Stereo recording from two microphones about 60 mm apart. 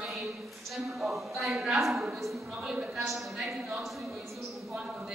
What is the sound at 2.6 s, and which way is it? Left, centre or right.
Speech, centre.